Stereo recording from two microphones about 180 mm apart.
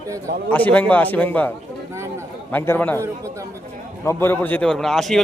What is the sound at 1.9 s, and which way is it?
Speech, 15° right (ahead or behind).